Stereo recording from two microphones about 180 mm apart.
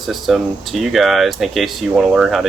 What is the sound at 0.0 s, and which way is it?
Speech, centre (ahead or behind).